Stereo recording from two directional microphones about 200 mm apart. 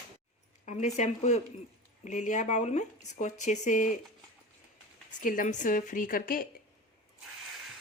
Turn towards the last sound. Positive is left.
turn(degrees=45)  # may be behind; listen again after turning